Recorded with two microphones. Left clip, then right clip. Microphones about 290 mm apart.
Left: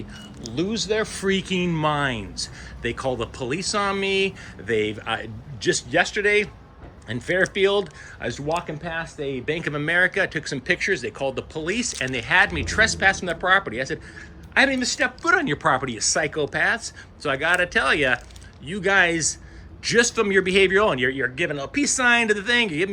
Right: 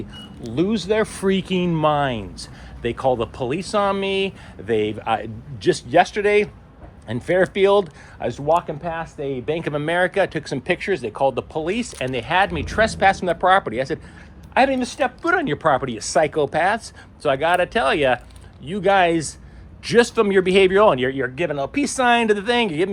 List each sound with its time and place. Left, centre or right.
0.4 s speech: centre